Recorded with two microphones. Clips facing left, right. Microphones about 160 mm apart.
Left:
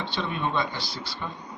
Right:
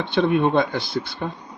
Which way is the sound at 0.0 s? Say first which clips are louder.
Right 11 dB; 55° right (ahead or behind).